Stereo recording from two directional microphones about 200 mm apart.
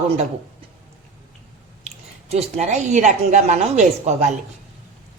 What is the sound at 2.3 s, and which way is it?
A woman's voice, 35° right (ahead or behind).